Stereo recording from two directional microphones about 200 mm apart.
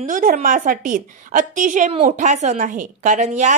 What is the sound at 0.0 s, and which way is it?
A woman's voice, 45° right (ahead or behind).